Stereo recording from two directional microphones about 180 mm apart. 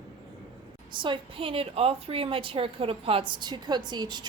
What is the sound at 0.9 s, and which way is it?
A woman's voice, 25° right (ahead or behind).